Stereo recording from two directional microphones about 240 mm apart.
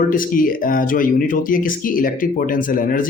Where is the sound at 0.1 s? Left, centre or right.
Left.